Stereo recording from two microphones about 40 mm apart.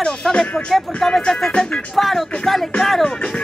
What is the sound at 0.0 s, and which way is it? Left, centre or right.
Speech, left.